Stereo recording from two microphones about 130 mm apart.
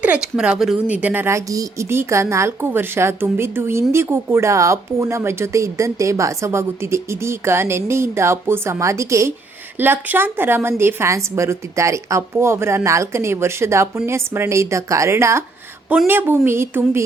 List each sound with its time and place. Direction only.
0.0 s a woman's voice: 10° right (ahead or behind)